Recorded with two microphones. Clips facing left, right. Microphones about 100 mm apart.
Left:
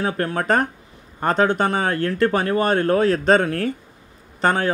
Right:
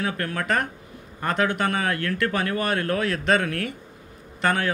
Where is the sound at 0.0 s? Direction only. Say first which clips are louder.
Left 5 dB; 30° left (ahead or behind).